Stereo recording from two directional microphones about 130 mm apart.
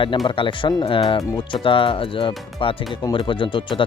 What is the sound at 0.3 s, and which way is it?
Speech, 40° left (ahead or behind).